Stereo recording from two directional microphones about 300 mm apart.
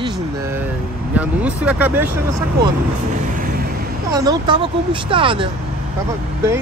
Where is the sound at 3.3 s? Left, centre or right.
Right.